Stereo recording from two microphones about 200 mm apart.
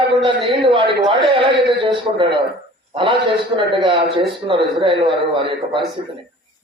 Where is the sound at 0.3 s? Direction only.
25° right (ahead or behind).